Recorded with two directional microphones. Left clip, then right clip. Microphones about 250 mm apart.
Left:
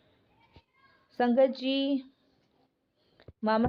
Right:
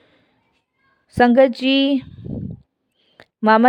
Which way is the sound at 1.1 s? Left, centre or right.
Right.